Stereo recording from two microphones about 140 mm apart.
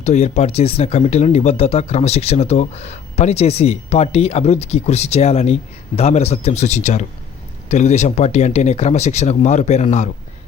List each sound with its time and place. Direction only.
0.0 s speech: 55° left (ahead or behind)